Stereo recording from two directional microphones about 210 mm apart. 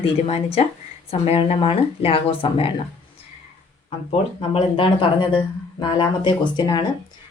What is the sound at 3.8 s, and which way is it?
Speech, 25° left (ahead or behind).